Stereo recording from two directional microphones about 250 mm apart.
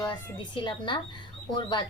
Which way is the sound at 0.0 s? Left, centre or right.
Centre.